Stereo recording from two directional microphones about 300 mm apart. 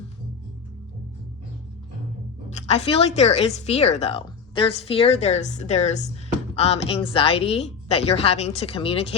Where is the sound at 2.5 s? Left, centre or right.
Left.